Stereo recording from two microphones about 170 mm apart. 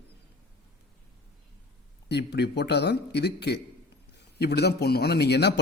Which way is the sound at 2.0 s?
80° left.